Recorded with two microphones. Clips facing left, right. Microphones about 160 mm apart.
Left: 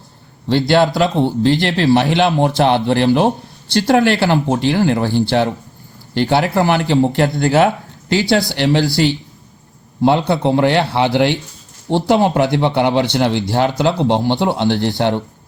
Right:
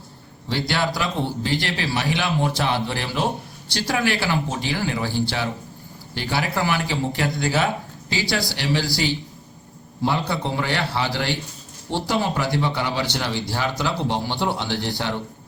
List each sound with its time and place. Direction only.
0.4 s speech: 60° left (ahead or behind)